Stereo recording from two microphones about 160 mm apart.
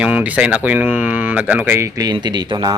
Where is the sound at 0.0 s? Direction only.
10° right (ahead or behind).